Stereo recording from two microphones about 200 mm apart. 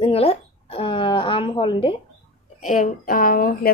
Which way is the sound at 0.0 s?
30° left (ahead or behind).